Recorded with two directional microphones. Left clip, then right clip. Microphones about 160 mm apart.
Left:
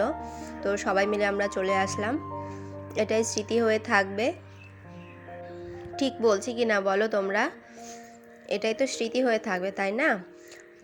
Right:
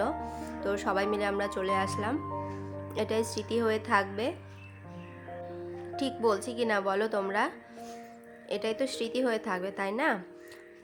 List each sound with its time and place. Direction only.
0.2 s music: centre (ahead or behind)
0.6 s a woman's voice: 10° left (ahead or behind)
2.1 s speech: centre (ahead or behind)
2.9 s a woman's voice: 15° left (ahead or behind)
5.5 s speech: 10° left (ahead or behind)
7.8 s music: 5° left (ahead or behind)
8.4 s a woman's voice: 15° left (ahead or behind)